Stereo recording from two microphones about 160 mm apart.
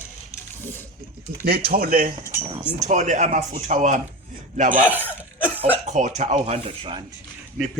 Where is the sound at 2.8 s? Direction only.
45° right (ahead or behind).